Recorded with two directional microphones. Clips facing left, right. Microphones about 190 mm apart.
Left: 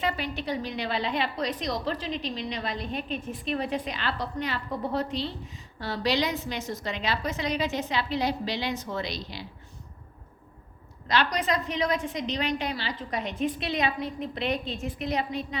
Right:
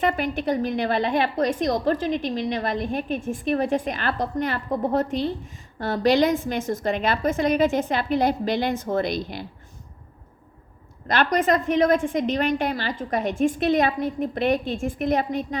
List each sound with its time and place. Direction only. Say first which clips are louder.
0.0 s a woman's voice: right 7 dB; 50° right (ahead or behind)
11.1 s a woman's voice: right 6 dB; 50° right (ahead or behind)